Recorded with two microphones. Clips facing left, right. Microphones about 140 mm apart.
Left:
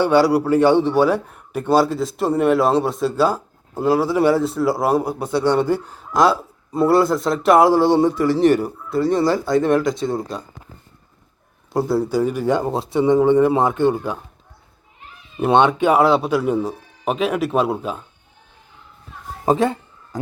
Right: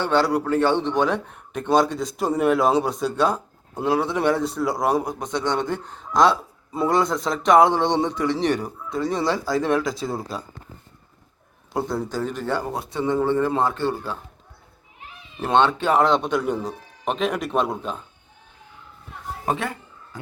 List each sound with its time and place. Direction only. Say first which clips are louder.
0.0 s a man's voice: left 6 dB; 10° left (ahead or behind)
11.7 s a man's voice: left 7 dB; 5° left (ahead or behind)
15.4 s a man's voice: left 4 dB; 15° left (ahead or behind)
19.5 s speech: left 9 dB; 30° left (ahead or behind)